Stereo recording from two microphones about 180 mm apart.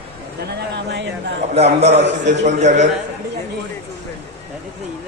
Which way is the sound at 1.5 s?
35° right (ahead or behind).